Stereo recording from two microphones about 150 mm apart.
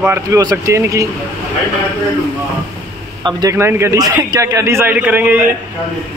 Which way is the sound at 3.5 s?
15° right (ahead or behind).